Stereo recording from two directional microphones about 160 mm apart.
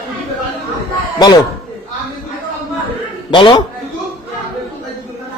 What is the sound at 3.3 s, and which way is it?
Speech, 30° left (ahead or behind).